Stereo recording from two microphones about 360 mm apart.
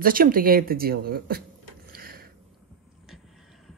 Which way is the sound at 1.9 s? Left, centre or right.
Right.